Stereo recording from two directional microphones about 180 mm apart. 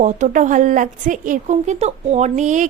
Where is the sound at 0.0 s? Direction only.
45° right (ahead or behind).